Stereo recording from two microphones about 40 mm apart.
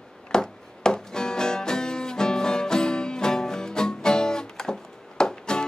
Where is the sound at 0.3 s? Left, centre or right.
Centre.